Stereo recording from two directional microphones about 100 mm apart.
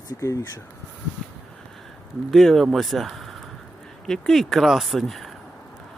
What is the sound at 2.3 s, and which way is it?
Speech, centre (ahead or behind).